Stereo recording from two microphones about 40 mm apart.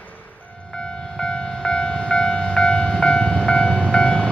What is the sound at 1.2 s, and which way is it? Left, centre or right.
Train, left.